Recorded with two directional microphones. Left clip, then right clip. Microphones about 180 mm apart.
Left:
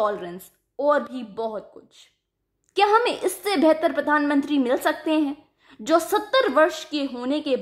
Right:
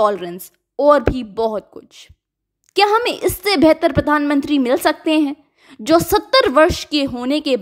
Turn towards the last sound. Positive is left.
turn(degrees=-30)  # may be behind; listen again after turning